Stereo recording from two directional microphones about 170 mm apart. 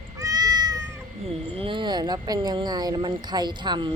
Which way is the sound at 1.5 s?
30° right (ahead or behind).